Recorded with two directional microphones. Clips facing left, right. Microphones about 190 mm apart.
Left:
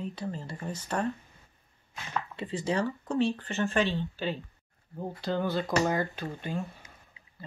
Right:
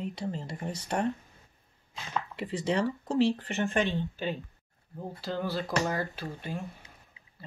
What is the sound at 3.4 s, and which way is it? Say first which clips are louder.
Speech: left 1 dB; 15° right (ahead or behind).